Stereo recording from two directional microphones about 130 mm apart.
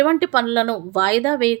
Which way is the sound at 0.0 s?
15° left (ahead or behind).